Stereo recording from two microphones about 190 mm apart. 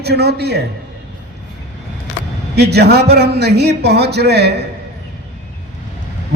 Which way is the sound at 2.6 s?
60° right (ahead or behind).